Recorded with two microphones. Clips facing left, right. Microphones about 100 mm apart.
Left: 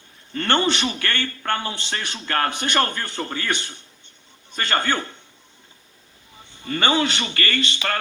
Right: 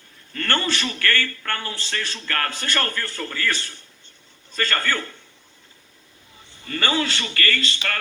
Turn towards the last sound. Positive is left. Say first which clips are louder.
# left 2 dB
turn(degrees=25)  # may be behind; listen again after turning